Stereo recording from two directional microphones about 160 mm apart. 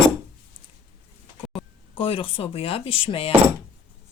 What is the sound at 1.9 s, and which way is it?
Speech, 35° left (ahead or behind).